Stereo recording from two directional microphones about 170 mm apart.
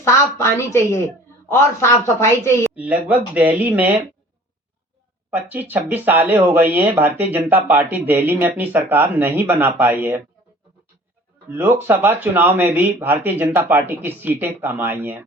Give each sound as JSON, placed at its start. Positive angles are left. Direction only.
{"t": 0.0, "sound": "a woman's voice", "side_deg": 15}
{"t": 2.7, "sound": "speech", "side_deg": -10}
{"t": 5.3, "sound": "speech", "side_deg": -10}
{"t": 11.4, "sound": "speech", "side_deg": -15}